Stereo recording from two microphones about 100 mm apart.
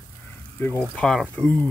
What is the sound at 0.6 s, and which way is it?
Speech, 20° left (ahead or behind).